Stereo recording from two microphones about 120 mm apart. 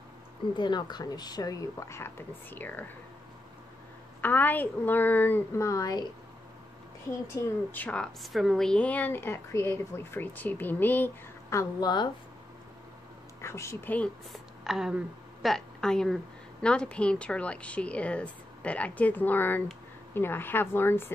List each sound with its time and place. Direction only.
0.6 s speech: 35° left (ahead or behind); by 2.8 s 15° left (ahead or behind)
4.2 s speech: 15° left (ahead or behind)
5.7 s speech: 30° left (ahead or behind)
7.4 s a woman's voice: 30° left (ahead or behind)
7.7 s speech: 10° left (ahead or behind)
11.5 s speech: 35° left (ahead or behind)
13.4 s speech: 25° left (ahead or behind)
13.9 s speech: 10° left (ahead or behind)
14.6 s a woman's voice: 5° right (ahead or behind); by 21.1 s 20° left (ahead or behind)